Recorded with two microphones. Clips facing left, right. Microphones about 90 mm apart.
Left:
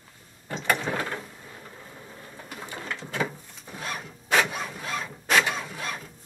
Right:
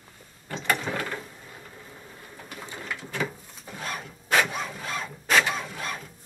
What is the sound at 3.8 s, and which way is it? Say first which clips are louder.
Wood: even; centre (ahead or behind).